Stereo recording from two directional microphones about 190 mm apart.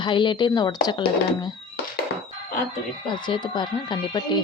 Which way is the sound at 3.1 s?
25° left (ahead or behind).